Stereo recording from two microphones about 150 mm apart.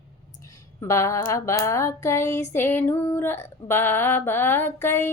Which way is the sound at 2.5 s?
15° left (ahead or behind).